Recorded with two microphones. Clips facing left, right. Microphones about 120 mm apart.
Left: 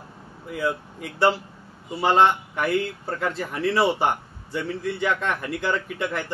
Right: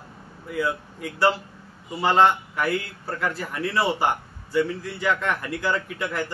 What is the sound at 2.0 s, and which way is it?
Speech, 20° left (ahead or behind).